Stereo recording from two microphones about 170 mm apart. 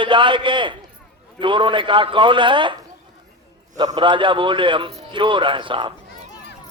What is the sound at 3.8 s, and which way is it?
A man's voice, 25° right (ahead or behind).